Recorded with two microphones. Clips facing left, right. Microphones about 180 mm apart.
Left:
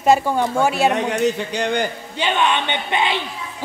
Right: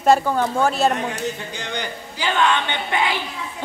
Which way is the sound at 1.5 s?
60° left (ahead or behind).